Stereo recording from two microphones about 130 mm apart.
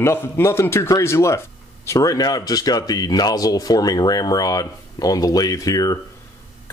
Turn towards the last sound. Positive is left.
turn(degrees=25)  # may be behind; listen again after turning